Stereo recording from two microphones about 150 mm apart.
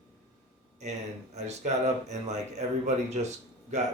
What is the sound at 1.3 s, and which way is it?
Speech, 50° right (ahead or behind).